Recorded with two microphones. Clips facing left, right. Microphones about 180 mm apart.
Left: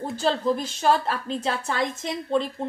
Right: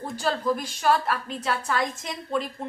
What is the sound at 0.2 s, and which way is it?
A woman's voice, 25° left (ahead or behind).